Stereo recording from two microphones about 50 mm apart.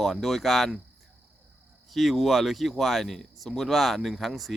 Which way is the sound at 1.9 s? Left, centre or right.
Centre.